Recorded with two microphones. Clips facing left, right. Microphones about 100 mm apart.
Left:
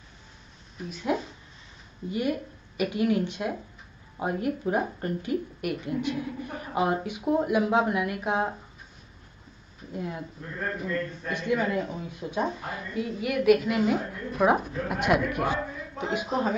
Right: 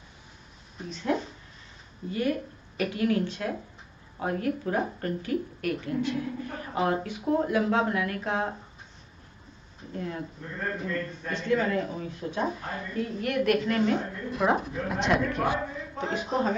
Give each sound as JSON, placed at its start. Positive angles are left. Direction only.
{"t": 0.8, "sound": "speech", "side_deg": 10}
{"t": 9.9, "sound": "speech", "side_deg": 10}